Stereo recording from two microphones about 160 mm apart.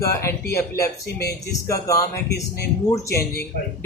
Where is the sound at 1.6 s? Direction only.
20° left (ahead or behind).